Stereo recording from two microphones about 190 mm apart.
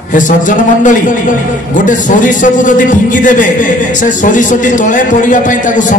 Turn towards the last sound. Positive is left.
turn(degrees=40)  # may be behind; listen again after turning